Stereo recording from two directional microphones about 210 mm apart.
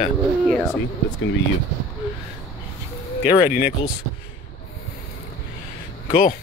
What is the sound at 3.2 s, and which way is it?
Speech, 30° left (ahead or behind).